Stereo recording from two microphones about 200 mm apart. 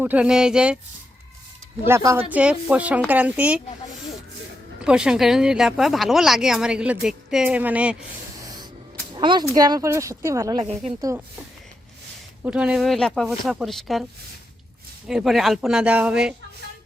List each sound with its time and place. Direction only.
0.0 s speech: 5° right (ahead or behind)
2.0 s speech: 15° right (ahead or behind)
4.8 s speech: 5° right (ahead or behind)
9.1 s speech: 20° right (ahead or behind)
10.6 s a woman's voice: 30° right (ahead or behind)
12.4 s speech: 5° right (ahead or behind)